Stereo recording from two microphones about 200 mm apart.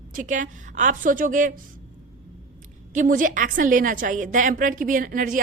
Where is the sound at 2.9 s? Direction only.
40° right (ahead or behind).